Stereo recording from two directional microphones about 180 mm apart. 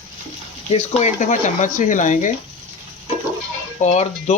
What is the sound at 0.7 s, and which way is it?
Speech, 40° left (ahead or behind).